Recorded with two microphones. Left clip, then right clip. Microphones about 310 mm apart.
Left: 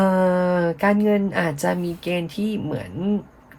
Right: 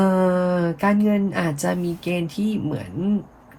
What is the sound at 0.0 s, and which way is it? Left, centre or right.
Speech, left.